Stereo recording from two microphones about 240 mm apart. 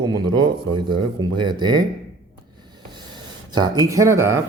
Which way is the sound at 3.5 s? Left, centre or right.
Centre.